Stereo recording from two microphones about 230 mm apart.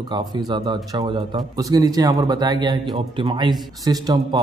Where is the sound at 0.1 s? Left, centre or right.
Centre.